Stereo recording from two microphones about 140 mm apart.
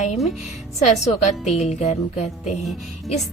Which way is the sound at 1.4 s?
55° left (ahead or behind).